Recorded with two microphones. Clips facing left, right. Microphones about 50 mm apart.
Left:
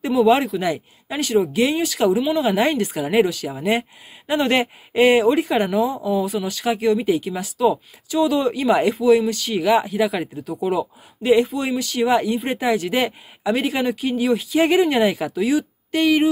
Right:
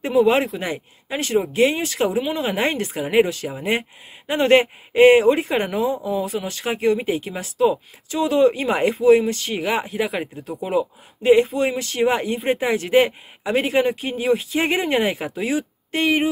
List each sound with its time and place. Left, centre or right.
0.0 s speech: right